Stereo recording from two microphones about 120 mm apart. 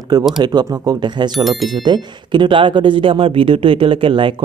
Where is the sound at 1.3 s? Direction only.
Centre (ahead or behind).